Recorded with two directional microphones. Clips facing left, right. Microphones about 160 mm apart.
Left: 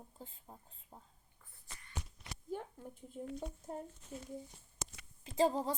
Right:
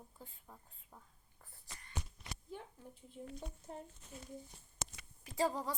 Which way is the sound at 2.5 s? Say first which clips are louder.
Left 7 dB; 45° left (ahead or behind).